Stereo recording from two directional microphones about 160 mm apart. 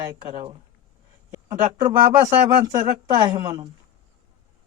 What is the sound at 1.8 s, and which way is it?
Speech, 25° right (ahead or behind).